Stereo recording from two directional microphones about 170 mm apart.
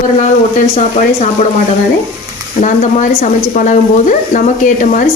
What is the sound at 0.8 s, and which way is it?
Speech, 45° left (ahead or behind).